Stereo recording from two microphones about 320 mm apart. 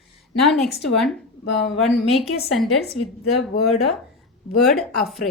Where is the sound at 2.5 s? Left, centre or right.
Centre.